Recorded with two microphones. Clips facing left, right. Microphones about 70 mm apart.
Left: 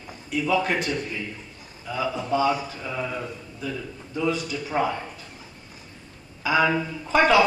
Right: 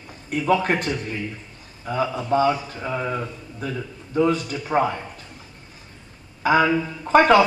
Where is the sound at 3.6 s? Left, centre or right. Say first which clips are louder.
Right 2 dB; right.